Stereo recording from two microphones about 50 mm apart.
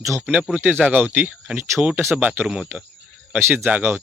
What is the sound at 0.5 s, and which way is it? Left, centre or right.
Speech, right.